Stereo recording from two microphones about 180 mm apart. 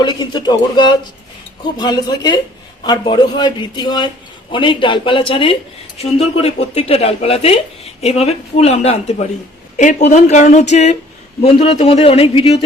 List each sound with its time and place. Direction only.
0.0 s speech: 25° left (ahead or behind)